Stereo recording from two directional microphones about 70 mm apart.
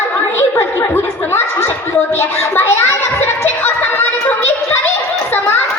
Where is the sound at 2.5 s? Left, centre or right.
Left.